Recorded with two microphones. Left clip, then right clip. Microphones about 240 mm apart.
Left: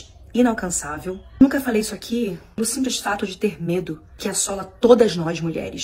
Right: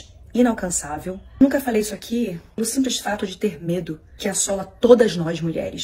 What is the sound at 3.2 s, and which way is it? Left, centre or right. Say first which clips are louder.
A woman's voice: left 1 dB; centre.